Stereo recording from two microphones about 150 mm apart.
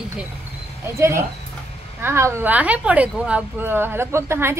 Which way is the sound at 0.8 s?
20° right (ahead or behind).